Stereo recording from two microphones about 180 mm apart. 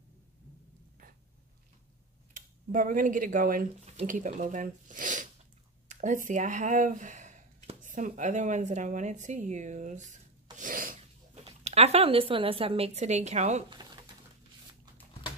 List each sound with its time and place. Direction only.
2.3 s speech: 50° right (ahead or behind)
11.4 s a woman's voice: 35° right (ahead or behind)